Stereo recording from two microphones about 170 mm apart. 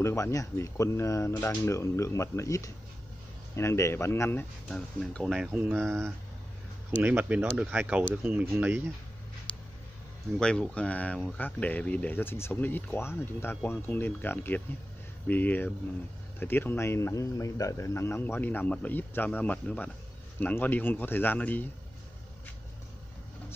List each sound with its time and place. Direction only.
0.0 s speech: 15° left (ahead or behind); by 8.8 s 10° right (ahead or behind)
10.4 s speech: 5° left (ahead or behind)